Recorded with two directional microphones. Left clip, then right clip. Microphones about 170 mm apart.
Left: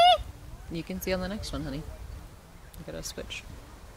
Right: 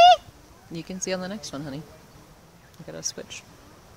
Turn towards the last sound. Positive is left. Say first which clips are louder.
# right 3 dB
turn(degrees=0)  # may be behind; listen again after turning